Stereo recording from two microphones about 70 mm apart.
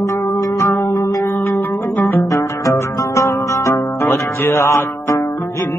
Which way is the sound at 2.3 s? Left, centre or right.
Left.